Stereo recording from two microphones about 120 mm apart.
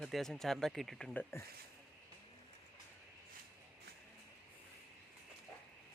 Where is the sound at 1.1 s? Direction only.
20° left (ahead or behind).